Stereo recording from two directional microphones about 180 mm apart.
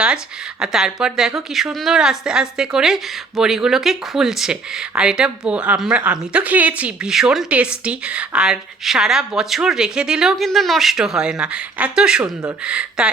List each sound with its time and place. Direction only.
0.6 s a woman's voice: centre (ahead or behind)